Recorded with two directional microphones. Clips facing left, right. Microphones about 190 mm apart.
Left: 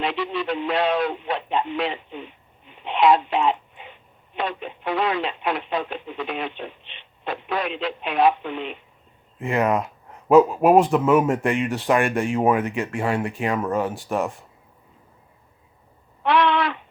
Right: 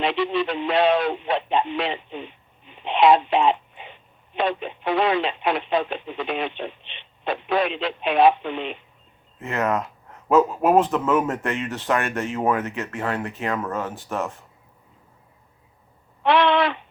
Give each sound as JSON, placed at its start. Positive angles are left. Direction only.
{"t": 0.0, "sound": "speech", "side_deg": -25}
{"t": 9.4, "sound": "speech", "side_deg": 15}
{"t": 16.2, "sound": "a sound", "side_deg": -25}